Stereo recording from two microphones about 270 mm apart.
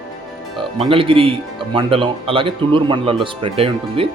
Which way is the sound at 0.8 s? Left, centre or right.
Centre.